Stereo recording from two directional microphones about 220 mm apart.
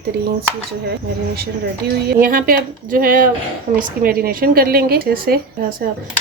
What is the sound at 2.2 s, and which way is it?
Speech, 40° right (ahead or behind).